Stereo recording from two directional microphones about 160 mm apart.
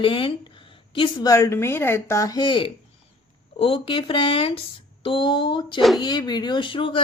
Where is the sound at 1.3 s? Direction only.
15° left (ahead or behind).